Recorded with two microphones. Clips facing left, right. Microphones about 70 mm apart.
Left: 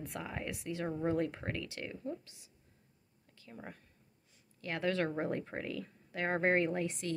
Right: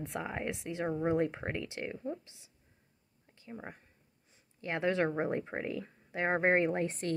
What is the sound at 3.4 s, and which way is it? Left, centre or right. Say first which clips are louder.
Speech: right 4 dB; right.